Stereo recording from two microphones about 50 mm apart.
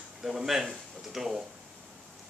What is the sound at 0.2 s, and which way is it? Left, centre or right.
Speech, centre.